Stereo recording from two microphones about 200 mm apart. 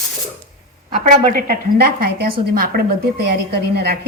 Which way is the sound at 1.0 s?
50° right (ahead or behind).